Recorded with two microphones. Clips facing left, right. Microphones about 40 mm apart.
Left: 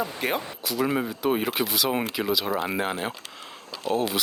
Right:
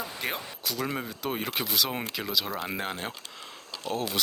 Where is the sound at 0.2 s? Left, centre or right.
Centre.